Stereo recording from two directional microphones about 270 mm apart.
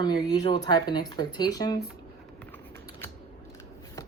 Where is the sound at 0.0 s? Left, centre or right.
Centre.